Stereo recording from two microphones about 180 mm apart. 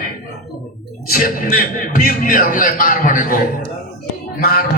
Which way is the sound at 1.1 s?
50° left (ahead or behind).